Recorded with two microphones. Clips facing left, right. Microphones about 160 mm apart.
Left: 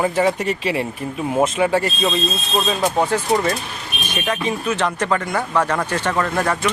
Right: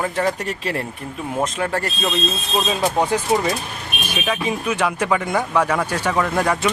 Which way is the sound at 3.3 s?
5° right (ahead or behind).